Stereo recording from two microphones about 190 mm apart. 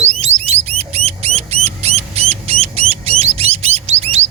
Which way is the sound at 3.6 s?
30° right (ahead or behind).